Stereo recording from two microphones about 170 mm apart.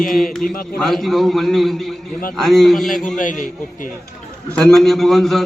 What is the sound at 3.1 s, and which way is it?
Speech, 50° left (ahead or behind).